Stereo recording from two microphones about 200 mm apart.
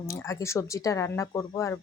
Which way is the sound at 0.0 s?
15° left (ahead or behind).